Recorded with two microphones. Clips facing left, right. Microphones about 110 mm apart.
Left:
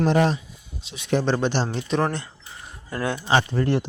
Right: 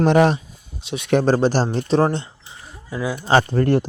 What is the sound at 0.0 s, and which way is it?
Speech, 70° right (ahead or behind).